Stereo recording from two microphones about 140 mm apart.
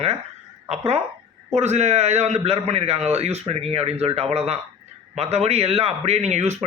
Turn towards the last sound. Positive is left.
turn(degrees=-50)  # may be behind; listen again after turning